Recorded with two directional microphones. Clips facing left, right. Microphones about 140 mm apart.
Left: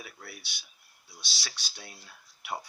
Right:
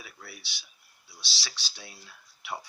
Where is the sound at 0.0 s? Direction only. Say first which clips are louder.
Left 1 dB; 50° left (ahead or behind).